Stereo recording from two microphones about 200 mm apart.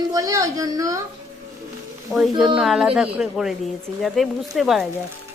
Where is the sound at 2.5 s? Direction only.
Centre (ahead or behind).